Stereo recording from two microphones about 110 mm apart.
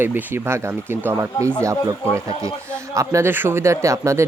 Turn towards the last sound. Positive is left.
turn(degrees=-25)  # may be behind; listen again after turning